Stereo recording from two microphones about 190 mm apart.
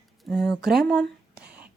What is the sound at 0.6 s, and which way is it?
Speech, centre (ahead or behind).